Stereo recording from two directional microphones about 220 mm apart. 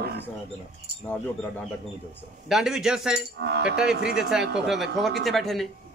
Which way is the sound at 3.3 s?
50° right (ahead or behind).